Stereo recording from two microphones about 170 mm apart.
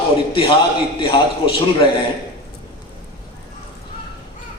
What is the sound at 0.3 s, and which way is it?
A man's voice, 30° left (ahead or behind).